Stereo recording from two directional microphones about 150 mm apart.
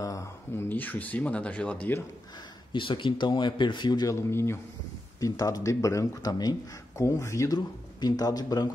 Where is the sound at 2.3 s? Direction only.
30° left (ahead or behind).